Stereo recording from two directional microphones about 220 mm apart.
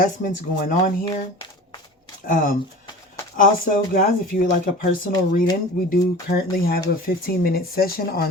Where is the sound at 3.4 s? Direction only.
40° left (ahead or behind).